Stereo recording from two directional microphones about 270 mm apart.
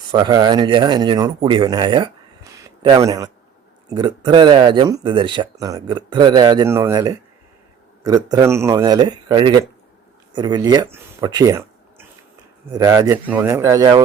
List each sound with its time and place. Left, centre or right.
0.1 s speech: centre